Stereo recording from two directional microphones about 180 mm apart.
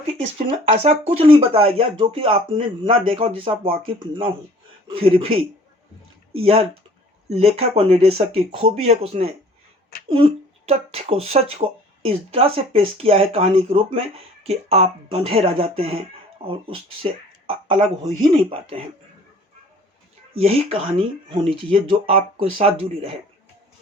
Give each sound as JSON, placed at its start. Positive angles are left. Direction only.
{"t": 0.1, "sound": "speech", "side_deg": -35}
{"t": 20.3, "sound": "speech", "side_deg": -35}